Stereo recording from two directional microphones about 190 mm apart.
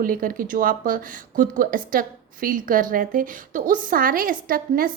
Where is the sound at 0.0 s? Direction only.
50° right (ahead or behind).